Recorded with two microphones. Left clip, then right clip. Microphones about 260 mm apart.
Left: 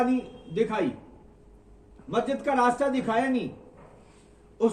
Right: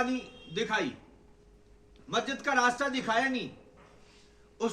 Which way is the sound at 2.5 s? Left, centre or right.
Right.